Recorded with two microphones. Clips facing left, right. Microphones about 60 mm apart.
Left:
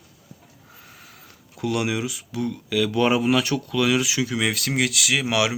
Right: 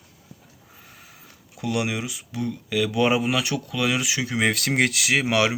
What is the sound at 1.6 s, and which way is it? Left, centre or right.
Speech, right.